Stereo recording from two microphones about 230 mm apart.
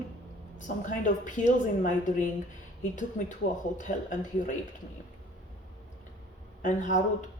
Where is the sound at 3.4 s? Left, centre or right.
Left.